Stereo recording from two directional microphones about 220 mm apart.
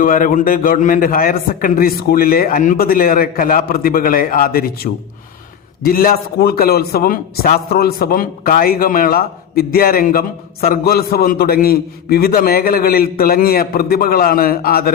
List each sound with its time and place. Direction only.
0.0 s a man's voice: 40° left (ahead or behind)